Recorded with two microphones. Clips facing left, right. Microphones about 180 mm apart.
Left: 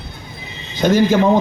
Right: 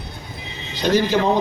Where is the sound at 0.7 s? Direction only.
50° left (ahead or behind).